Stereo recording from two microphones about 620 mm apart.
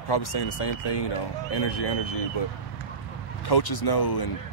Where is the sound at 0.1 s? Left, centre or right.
Left.